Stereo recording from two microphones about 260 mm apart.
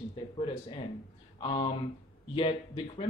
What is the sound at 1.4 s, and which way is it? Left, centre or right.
Speech, centre.